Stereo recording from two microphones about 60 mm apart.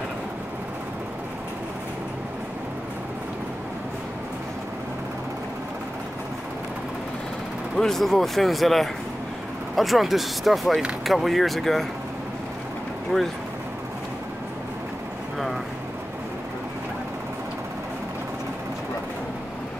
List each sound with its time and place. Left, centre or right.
7.7 s speech: centre
13.1 s speech: centre